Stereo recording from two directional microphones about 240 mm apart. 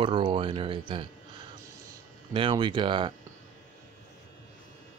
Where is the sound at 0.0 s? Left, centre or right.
Right.